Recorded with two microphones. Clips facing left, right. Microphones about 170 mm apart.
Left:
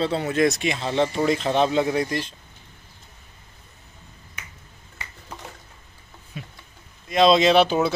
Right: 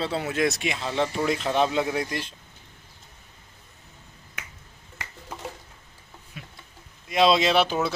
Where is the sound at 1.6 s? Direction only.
5° right (ahead or behind).